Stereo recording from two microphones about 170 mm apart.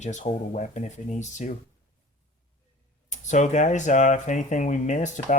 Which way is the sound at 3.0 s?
45° left (ahead or behind).